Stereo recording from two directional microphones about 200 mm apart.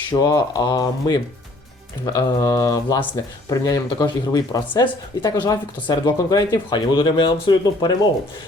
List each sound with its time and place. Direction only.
0.1 s speech: 20° left (ahead or behind)
2.0 s mantra: 15° left (ahead or behind)
3.5 s speech: 20° left (ahead or behind)